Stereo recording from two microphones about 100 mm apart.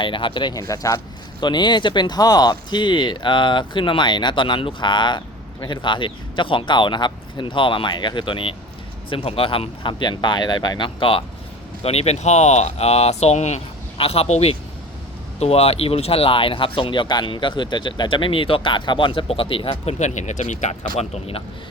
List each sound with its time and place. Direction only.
0.0 s speech: 55° left (ahead or behind)
0.5 s speech: 35° left (ahead or behind)
1.4 s speech: 50° left (ahead or behind)
11.8 s speech: 90° left; by 20.0 s 75° left (ahead or behind)
21.0 s speech: 85° left